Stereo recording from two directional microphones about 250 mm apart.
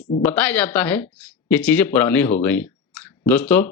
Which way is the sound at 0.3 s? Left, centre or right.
Centre.